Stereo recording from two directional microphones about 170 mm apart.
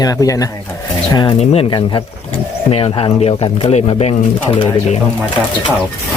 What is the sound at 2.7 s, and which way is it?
Speech, 35° left (ahead or behind).